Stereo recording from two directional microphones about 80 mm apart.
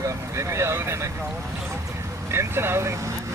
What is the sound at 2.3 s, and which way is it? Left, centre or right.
Vehicle, right.